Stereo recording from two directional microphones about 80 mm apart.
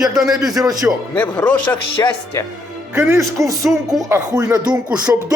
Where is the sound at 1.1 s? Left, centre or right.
Centre.